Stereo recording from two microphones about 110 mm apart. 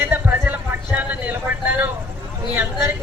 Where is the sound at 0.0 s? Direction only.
15° right (ahead or behind).